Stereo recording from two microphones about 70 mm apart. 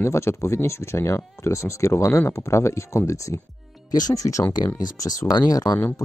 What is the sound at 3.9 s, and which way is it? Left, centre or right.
Speech, left.